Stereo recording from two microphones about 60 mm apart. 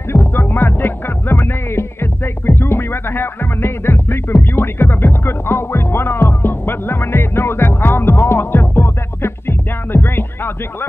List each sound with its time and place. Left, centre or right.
0.1 s music: left